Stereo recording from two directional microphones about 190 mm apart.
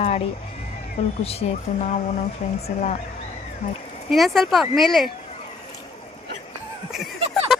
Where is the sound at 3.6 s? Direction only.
40° left (ahead or behind).